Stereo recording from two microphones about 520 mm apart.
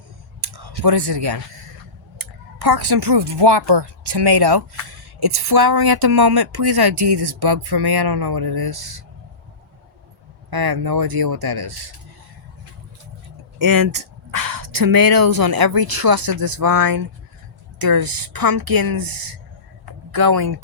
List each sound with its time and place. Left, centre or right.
0.4 s a sound: right
2.1 s a woman's voice: right
10.5 s a woman's voice: right
13.6 s a woman's voice: right